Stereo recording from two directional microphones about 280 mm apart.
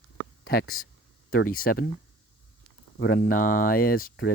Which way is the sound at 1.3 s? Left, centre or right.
Left.